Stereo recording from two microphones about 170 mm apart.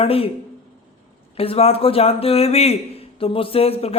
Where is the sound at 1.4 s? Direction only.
35° left (ahead or behind).